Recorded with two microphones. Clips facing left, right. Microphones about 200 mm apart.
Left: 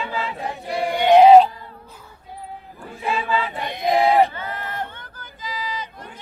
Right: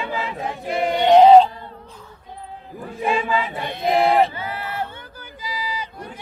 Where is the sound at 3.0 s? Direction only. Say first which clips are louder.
Right 2 dB; 15° right (ahead or behind).